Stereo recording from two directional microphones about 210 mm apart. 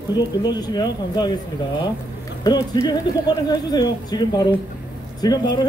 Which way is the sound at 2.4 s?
20° left (ahead or behind).